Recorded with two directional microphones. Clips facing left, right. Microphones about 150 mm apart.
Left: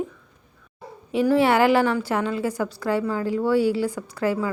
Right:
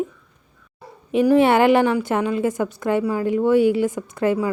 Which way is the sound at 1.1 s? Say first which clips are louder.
Right 4 dB; 20° right (ahead or behind).